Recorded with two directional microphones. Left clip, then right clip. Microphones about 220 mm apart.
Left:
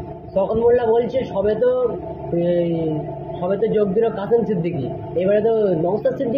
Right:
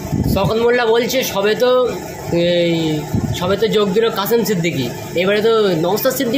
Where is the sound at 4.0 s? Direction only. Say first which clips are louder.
Right 3 dB; 50° right (ahead or behind).